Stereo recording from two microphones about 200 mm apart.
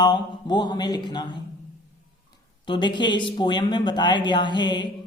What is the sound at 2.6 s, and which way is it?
Speech, 25° left (ahead or behind).